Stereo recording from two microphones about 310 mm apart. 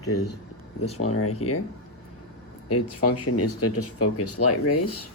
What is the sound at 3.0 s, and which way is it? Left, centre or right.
Speech, left.